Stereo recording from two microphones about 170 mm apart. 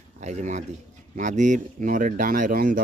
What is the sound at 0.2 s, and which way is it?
Speech, 45° right (ahead or behind).